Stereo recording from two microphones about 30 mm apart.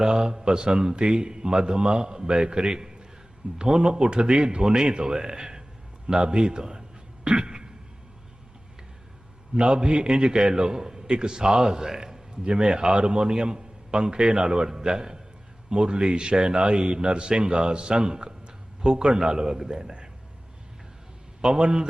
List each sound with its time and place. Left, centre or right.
0.0 s a man's voice: right
7.3 s throat clearing: right
9.6 s a man's voice: right
11.9 s a sound: centre
12.3 s a man's voice: right
21.4 s a man's voice: right